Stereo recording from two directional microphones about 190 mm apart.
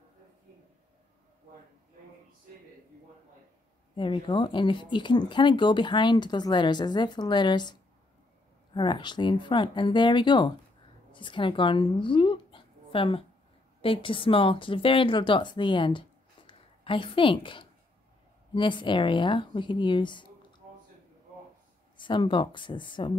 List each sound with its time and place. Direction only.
3.9 s speech: 25° left (ahead or behind)
8.7 s speech: 25° left (ahead or behind)
21.9 s speech: 25° left (ahead or behind)